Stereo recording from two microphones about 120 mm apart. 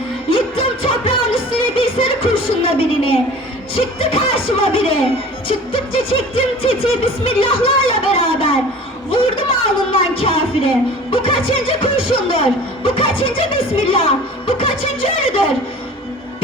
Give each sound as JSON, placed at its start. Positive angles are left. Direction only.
{"t": 0.3, "sound": "music", "side_deg": 50}
{"t": 3.8, "sound": "speech", "side_deg": 50}